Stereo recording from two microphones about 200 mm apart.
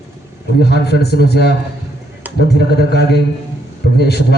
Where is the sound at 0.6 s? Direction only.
55° left (ahead or behind).